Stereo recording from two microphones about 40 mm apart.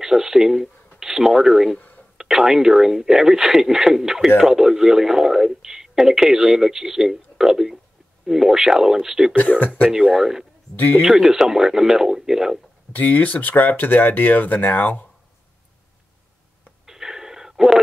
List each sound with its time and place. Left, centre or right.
0.0 s speech: centre
11.0 s speech: centre
12.9 s speech: left
16.8 s a sound: centre